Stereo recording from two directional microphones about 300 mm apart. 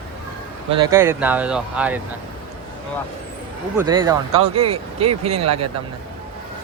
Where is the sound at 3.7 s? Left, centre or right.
Centre.